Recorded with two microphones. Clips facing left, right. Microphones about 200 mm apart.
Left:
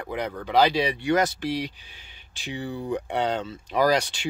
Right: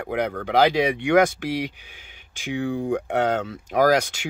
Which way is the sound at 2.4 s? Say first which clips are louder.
Right 6 dB; 50° right (ahead or behind).